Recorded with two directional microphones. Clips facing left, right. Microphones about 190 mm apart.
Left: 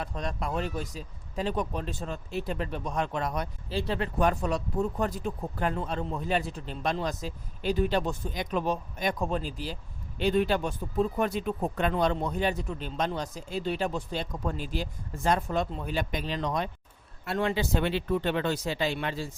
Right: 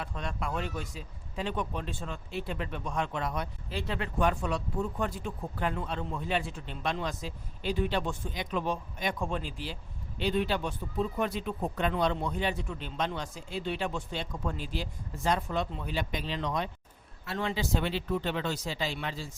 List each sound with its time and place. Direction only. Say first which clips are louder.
0.0 s speech: left 3 dB; 40° left (ahead or behind)
17.3 s speech: left 4 dB; 55° left (ahead or behind)